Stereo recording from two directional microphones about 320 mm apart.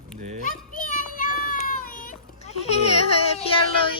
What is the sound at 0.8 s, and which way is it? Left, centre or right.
Children playing, left.